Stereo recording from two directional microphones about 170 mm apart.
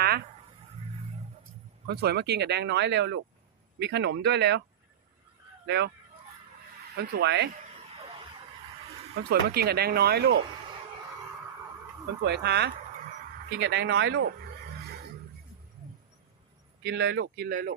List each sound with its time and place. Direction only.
1.9 s speech: 70° right (ahead or behind); by 3.2 s 90° right
3.8 s speech: 80° right
5.6 s speech: 75° right (ahead or behind)
6.9 s speech: 75° right (ahead or behind)
9.3 s speech: 65° right (ahead or behind)
12.2 s speech: 80° right
13.6 s speech: 90° right
16.8 s speech: 90° right
17.5 s speech: 55° right (ahead or behind)